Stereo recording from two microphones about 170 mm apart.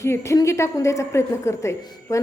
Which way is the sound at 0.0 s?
15° left (ahead or behind).